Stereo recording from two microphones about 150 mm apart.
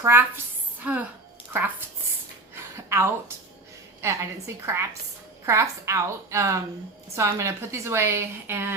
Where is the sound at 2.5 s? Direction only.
15° right (ahead or behind).